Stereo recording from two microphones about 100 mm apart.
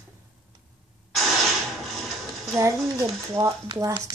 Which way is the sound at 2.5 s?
30° right (ahead or behind).